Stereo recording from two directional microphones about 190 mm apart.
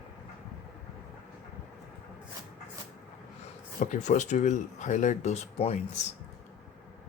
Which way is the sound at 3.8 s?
40° left (ahead or behind).